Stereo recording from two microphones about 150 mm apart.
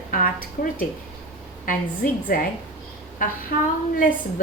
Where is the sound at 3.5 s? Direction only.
70° left (ahead or behind).